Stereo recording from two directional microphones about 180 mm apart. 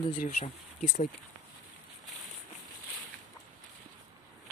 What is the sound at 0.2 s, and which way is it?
Speech, 40° left (ahead or behind).